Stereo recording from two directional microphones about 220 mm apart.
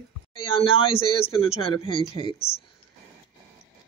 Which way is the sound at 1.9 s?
20° left (ahead or behind).